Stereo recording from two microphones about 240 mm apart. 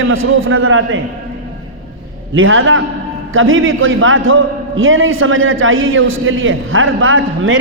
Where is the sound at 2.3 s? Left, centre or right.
Right.